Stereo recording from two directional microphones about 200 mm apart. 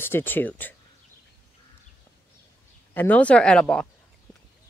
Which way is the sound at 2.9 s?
10° left (ahead or behind).